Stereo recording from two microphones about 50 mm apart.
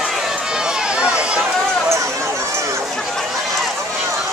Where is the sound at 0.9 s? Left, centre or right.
Centre.